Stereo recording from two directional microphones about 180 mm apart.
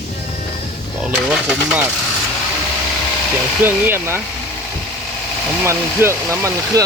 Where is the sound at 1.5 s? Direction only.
Centre (ahead or behind).